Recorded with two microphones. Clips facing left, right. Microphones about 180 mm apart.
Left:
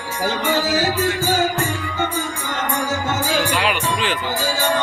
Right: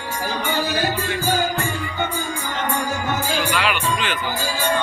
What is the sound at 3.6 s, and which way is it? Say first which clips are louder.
Music: left 1 dB; 35° left (ahead or behind).